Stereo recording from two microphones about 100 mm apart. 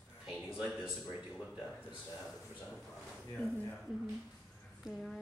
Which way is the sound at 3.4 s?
15° left (ahead or behind).